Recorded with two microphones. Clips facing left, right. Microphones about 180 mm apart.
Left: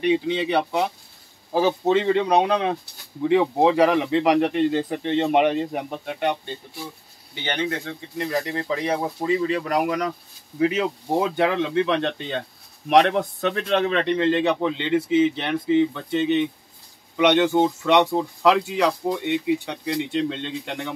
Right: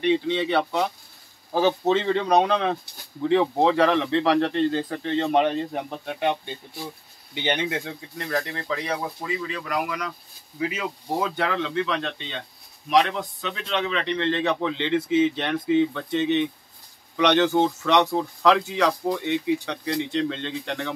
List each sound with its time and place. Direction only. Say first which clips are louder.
0.0 s speech: left 1 dB; 10° left (ahead or behind)
7.4 s speech: even; 15° right (ahead or behind)
8.2 s speech: left 3 dB; 10° left (ahead or behind)
8.6 s speech: left 4 dB; 25° left (ahead or behind)
11.1 s speech: left 5 dB; 20° left (ahead or behind)
12.2 s speech: left 7 dB; 50° left (ahead or behind)
14.5 s speech: left 2 dB; 5° left (ahead or behind)